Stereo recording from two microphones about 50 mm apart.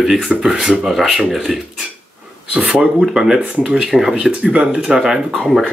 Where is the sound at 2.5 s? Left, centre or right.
Centre.